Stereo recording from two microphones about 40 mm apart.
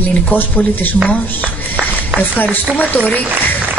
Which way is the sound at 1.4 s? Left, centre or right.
Right.